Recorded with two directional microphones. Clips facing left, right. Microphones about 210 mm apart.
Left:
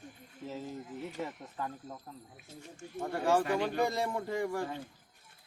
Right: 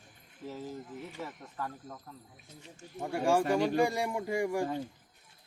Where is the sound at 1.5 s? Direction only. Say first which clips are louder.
Right 1 dB; 20° left (ahead or behind).